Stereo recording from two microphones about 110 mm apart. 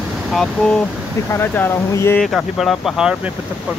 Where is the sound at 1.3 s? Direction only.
20° left (ahead or behind).